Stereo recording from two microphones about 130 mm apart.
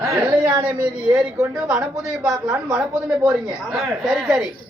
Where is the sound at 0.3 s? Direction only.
30° right (ahead or behind).